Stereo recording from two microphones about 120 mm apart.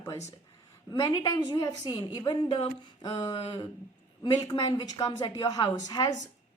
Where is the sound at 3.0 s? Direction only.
35° left (ahead or behind).